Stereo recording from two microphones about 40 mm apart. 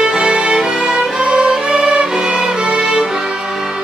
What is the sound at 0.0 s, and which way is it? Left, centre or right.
Music, right.